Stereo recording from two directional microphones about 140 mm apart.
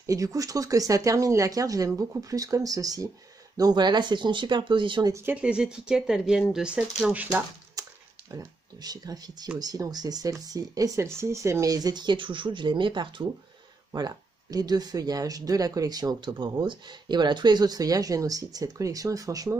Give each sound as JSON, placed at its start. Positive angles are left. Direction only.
{"t": 0.0, "sound": "speech", "side_deg": -25}
{"t": 5.1, "sound": "speech", "side_deg": -15}
{"t": 7.8, "sound": "a sound", "side_deg": -25}
{"t": 8.3, "sound": "speech", "side_deg": -25}